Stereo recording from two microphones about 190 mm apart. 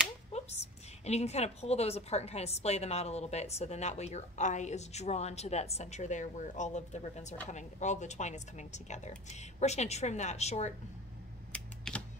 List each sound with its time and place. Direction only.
0.3 s a sound: 35° left (ahead or behind)
1.0 s a woman's voice: 35° left (ahead or behind)
11.5 s typewriter: 5° left (ahead or behind)